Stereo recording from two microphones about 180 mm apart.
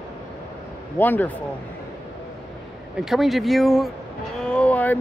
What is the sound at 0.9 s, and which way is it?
Speech, 10° left (ahead or behind).